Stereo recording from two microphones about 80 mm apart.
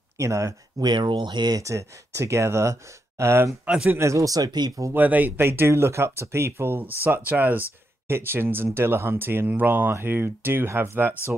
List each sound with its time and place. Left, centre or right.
0.2 s speech: right
0.7 s speech: right
1.6 s speech: right
3.6 s speech: centre
4.0 s speech: right
4.9 s speech: right